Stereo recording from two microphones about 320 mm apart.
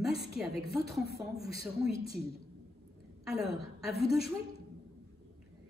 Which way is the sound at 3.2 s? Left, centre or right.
Centre.